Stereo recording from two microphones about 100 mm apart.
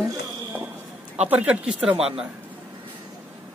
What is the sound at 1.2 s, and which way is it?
Speech, 15° right (ahead or behind).